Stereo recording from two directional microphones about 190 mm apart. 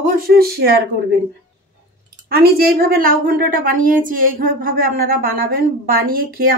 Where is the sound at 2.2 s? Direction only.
55° right (ahead or behind).